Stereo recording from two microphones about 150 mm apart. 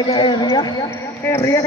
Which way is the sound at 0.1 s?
30° left (ahead or behind).